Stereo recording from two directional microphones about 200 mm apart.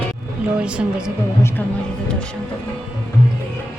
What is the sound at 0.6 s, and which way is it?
Speech, 5° right (ahead or behind).